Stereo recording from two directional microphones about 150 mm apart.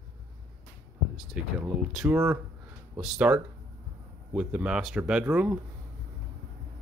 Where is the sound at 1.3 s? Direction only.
10° right (ahead or behind).